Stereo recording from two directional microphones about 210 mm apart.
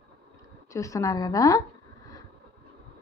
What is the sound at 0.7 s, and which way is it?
Speech, 15° left (ahead or behind).